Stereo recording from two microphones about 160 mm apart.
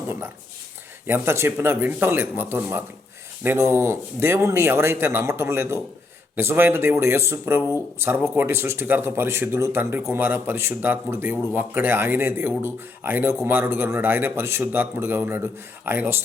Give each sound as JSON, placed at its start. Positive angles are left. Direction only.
{"t": 1.0, "sound": "speech", "side_deg": -15}